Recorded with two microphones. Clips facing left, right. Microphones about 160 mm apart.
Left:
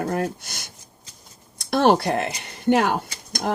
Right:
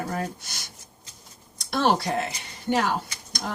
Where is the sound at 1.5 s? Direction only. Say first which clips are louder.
Left 5 dB; 55° left (ahead or behind).